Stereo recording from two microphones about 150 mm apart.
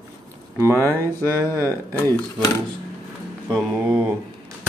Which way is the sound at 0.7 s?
10° left (ahead or behind).